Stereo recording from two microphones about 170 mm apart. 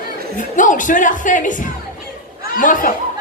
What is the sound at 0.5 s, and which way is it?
Speech, 50° left (ahead or behind).